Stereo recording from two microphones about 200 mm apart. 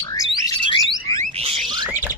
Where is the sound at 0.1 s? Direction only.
20° left (ahead or behind).